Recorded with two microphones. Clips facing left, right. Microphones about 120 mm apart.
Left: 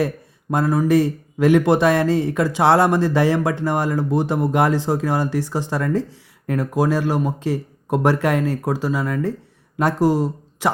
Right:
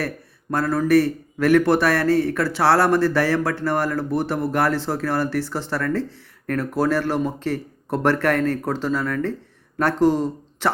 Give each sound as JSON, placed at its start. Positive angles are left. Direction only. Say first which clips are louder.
{"t": 0.5, "sound": "a man's voice", "louder": "left 1 dB", "side_deg": 15}